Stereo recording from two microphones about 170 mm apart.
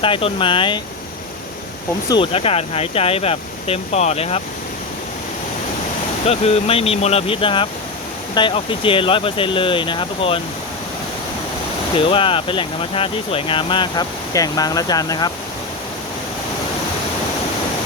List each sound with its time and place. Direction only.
0.0 s speech: 30° left (ahead or behind)
2.0 s speech: 30° left (ahead or behind)
6.2 s speech: 35° left (ahead or behind)
11.9 s speech: 30° left (ahead or behind)